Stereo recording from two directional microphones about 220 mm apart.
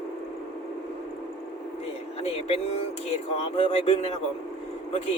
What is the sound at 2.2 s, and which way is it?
Speech, 30° left (ahead or behind).